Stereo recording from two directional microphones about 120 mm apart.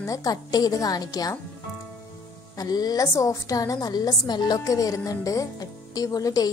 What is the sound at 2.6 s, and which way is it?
A woman's voice, 35° left (ahead or behind).